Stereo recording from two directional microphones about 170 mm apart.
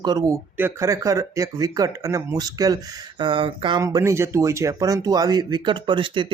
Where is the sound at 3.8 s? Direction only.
20° right (ahead or behind).